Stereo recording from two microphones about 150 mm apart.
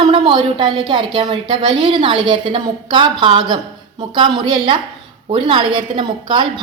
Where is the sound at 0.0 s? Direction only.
30° right (ahead or behind).